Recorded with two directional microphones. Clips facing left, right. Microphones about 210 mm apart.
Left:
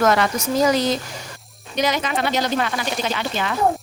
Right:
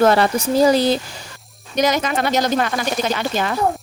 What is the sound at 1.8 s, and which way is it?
A woman's voice, 45° right (ahead or behind).